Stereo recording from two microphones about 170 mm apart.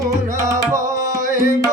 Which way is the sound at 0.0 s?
20° right (ahead or behind).